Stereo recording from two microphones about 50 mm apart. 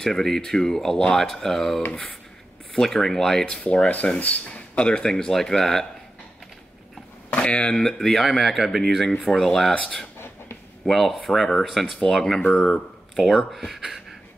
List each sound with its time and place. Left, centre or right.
0.0 s speech: centre
1.9 s speech: left
2.7 s speech: centre
3.6 s speech: left; by 5.9 s centre
7.2 s speech: left; by 9.1 s centre
9.4 s speech: centre
10.1 s a sound: left
10.9 s speech: centre
12.5 s speech: centre
13.1 s speech: centre